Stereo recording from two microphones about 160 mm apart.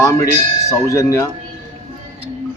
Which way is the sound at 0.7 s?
20° left (ahead or behind).